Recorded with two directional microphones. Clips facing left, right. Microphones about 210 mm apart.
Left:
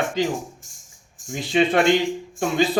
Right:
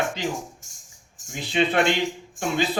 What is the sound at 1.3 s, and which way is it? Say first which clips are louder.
Speech: left 3 dB; 45° left (ahead or behind).